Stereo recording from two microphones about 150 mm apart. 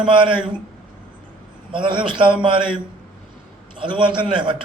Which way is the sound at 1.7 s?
35° right (ahead or behind).